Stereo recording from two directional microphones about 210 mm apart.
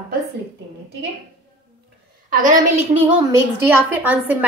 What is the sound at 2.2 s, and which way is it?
Speech, 40° right (ahead or behind).